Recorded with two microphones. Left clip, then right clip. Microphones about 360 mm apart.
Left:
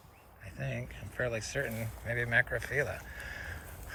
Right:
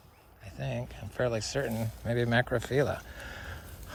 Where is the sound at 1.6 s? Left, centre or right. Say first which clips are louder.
Right 4 dB; right.